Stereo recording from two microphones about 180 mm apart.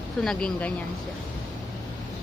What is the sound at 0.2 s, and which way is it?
Speech, 5° left (ahead or behind).